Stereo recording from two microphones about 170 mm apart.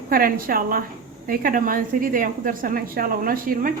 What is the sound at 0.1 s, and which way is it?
A woman's voice, 55° right (ahead or behind).